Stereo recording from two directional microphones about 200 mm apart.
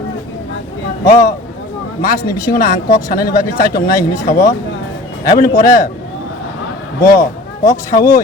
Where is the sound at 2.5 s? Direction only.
40° left (ahead or behind).